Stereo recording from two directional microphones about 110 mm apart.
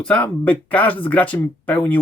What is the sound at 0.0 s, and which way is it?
Speech, 10° left (ahead or behind).